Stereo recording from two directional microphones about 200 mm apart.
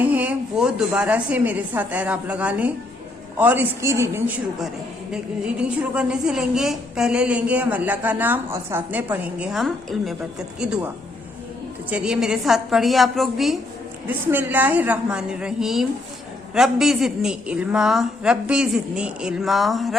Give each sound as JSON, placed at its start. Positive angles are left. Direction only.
{"t": 0.0, "sound": "a woman's voice", "side_deg": -10}